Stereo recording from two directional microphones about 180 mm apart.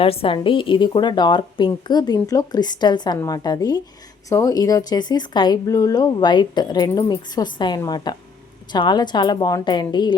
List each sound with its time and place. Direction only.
0.0 s a woman's voice: 30° left (ahead or behind)